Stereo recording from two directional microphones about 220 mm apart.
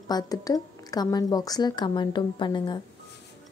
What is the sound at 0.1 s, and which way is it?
A woman's voice, 15° left (ahead or behind).